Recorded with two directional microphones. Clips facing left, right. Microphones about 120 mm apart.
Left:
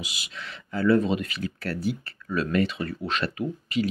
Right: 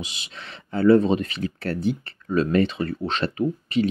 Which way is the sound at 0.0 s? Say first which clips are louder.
Right 1 dB; 30° right (ahead or behind).